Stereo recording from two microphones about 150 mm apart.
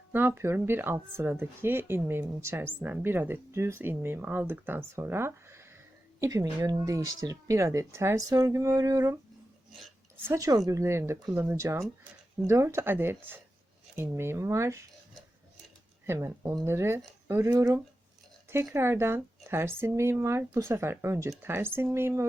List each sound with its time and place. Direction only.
0.1 s speech: 15° right (ahead or behind)
10.2 s speech: 20° right (ahead or behind)
16.0 s speech: 15° right (ahead or behind)